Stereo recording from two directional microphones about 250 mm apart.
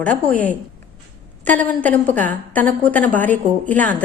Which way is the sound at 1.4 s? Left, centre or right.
Centre.